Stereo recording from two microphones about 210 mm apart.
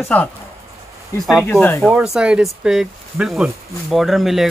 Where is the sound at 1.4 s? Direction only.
10° left (ahead or behind).